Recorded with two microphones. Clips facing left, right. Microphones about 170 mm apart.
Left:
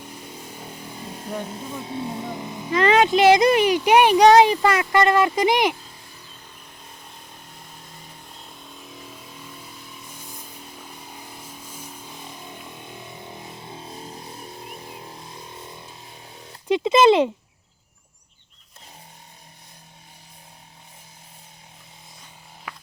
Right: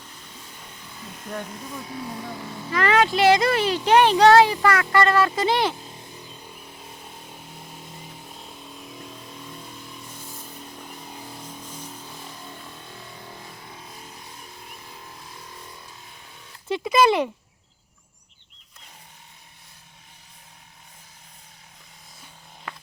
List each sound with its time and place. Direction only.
0.6 s vehicle: 35° left (ahead or behind)
1.3 s speech: 25° left (ahead or behind)
8.3 s vehicle: 5° right (ahead or behind)
11.4 s vehicle: 10° left (ahead or behind); by 16.6 s 30° left (ahead or behind)
16.6 s speech: 20° left (ahead or behind)
22.7 s a sound: 5° left (ahead or behind)